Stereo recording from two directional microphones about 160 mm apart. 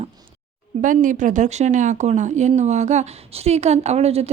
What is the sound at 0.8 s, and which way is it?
A woman's voice, 55° right (ahead or behind).